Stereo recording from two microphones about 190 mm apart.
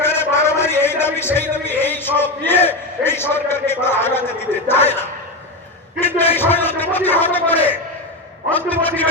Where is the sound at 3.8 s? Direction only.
10° left (ahead or behind).